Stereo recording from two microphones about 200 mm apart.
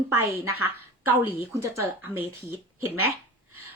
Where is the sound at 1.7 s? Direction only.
15° right (ahead or behind).